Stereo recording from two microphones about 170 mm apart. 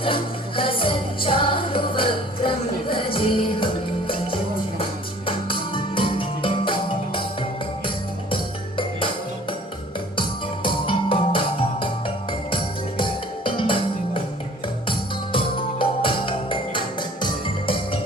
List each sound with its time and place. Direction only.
0.0 s music: 30° left (ahead or behind)
9.0 s music: 30° left (ahead or behind)